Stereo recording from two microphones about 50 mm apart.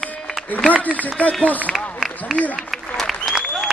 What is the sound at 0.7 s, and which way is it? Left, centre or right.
Speech, left.